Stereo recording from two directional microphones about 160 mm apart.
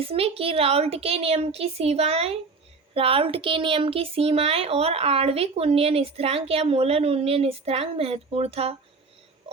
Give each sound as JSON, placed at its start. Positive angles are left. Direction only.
{"t": 0.0, "sound": "speech", "side_deg": -35}